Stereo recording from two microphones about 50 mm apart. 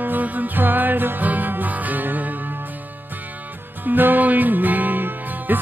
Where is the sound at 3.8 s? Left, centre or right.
Right.